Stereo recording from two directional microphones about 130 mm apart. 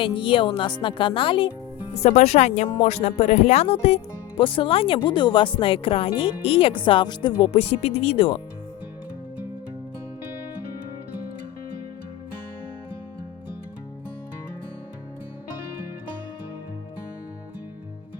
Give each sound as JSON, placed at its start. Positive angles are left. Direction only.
{"t": 0.0, "sound": "speech", "side_deg": 40}
{"t": 1.9, "sound": "speech", "side_deg": 55}